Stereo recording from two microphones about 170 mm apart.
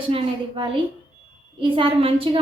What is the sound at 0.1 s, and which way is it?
A woman's voice, 30° right (ahead or behind).